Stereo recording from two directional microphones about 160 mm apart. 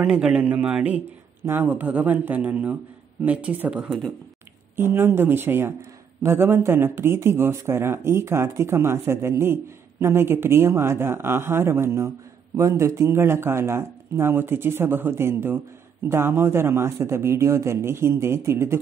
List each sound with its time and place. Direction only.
0.0 s speech: 5° right (ahead or behind)
4.7 s speech: 15° right (ahead or behind)